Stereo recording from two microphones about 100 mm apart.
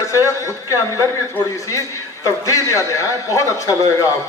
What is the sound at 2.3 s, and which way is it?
A man's voice, 35° left (ahead or behind).